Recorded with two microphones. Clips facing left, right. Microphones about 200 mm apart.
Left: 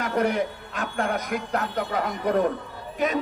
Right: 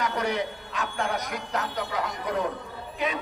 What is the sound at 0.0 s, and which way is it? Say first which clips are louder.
Speech: left 4 dB; 55° left (ahead or behind).